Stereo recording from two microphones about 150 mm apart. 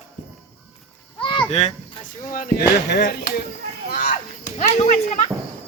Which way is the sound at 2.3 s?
90° left.